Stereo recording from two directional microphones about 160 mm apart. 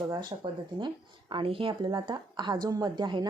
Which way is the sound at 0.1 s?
30° right (ahead or behind).